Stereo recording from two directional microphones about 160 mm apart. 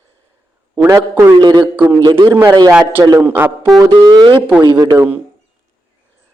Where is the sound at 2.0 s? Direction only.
25° right (ahead or behind).